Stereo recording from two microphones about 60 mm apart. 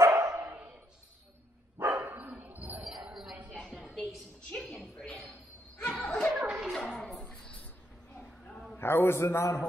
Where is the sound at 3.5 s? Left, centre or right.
Centre.